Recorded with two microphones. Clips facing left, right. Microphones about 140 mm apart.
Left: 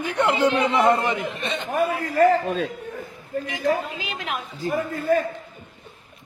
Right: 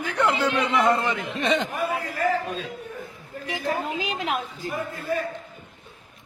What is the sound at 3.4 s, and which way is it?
Speech, 35° right (ahead or behind).